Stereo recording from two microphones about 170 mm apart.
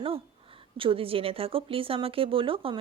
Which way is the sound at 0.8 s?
30° right (ahead or behind).